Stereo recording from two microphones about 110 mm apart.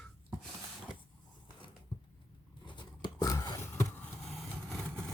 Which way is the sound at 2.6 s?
45° left (ahead or behind).